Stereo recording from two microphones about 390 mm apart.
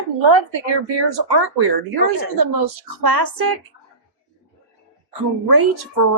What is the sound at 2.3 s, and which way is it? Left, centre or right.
A woman's voice, right.